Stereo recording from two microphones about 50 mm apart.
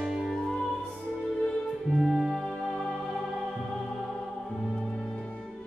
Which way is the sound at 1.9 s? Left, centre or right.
Centre.